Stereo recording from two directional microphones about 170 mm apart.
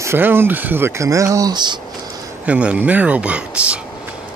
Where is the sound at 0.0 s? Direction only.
15° right (ahead or behind).